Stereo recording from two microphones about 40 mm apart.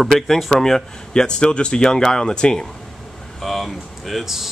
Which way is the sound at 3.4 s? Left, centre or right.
Centre.